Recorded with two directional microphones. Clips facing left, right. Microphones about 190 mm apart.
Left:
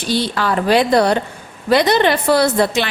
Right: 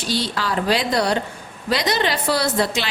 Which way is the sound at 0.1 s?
55° left (ahead or behind).